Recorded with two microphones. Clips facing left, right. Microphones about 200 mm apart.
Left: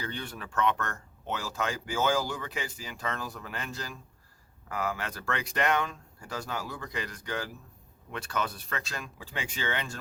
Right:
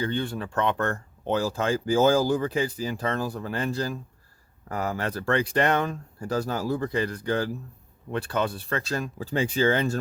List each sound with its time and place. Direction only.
0.0 s speech: 30° right (ahead or behind)